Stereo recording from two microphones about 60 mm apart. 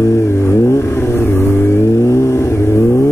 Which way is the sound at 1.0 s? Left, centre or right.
Left.